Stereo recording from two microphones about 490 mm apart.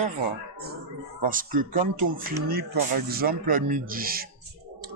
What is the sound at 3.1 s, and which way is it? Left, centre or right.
Speech, centre.